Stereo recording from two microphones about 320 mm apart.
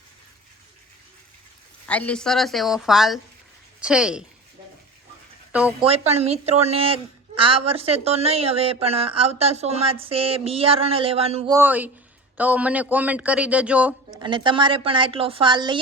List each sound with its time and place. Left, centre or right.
1.9 s a woman's voice: centre
5.5 s speech: centre
5.8 s a woman's voice: centre